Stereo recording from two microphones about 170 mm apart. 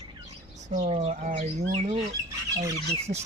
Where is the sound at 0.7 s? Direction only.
45° right (ahead or behind).